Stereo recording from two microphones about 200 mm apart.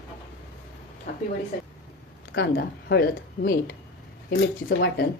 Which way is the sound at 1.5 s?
55° left (ahead or behind).